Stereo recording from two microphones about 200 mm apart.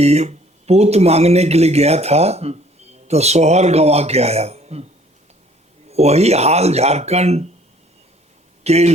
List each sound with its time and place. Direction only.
0.0 s speech: 30° right (ahead or behind)
5.9 s speech: 30° right (ahead or behind)
8.6 s speech: 30° right (ahead or behind)